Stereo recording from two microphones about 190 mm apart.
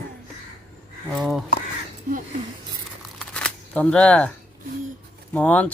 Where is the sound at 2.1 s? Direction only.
45° right (ahead or behind).